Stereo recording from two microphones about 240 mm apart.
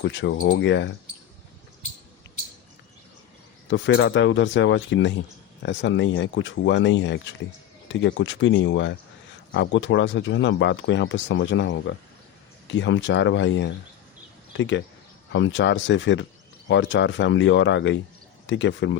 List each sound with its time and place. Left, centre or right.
0.0 s speech: left
3.7 s speech: left